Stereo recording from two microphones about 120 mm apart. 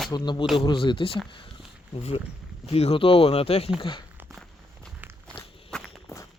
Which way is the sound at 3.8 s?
45° left (ahead or behind).